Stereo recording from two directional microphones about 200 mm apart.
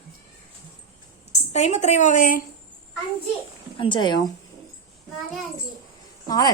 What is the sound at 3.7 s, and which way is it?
Speech, 25° left (ahead or behind).